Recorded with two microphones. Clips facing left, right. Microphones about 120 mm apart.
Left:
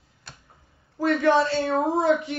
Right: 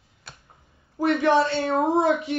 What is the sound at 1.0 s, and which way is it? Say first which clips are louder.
Speech: even; 20° right (ahead or behind).